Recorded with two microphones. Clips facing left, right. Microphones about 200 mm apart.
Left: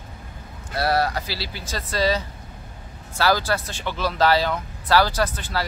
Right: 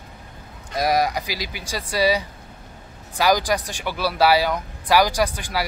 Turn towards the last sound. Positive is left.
turn(degrees=-10)  # may be behind; listen again after turning